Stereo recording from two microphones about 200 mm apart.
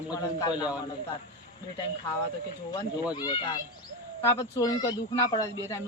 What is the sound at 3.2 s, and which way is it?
A man's voice, 20° left (ahead or behind).